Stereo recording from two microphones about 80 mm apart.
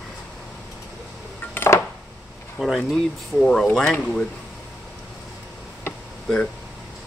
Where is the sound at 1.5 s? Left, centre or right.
Left.